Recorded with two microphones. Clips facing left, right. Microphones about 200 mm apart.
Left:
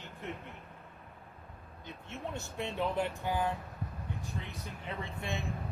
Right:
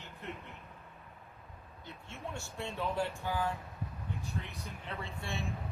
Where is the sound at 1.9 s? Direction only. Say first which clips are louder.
Left 3 dB; 20° left (ahead or behind).